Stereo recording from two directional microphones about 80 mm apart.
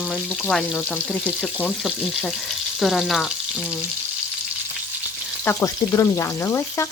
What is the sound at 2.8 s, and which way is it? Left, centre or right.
Frying, centre.